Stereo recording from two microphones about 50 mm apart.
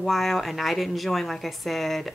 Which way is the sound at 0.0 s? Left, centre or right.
Centre.